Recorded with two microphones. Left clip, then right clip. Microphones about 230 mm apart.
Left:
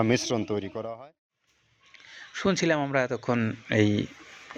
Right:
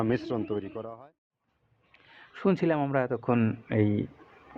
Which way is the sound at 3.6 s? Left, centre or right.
Centre.